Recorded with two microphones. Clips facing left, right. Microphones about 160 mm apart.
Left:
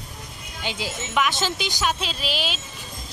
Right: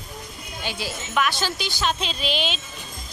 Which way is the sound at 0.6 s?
15° left (ahead or behind).